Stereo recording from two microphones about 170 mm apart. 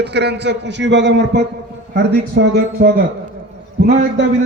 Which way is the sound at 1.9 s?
80° right.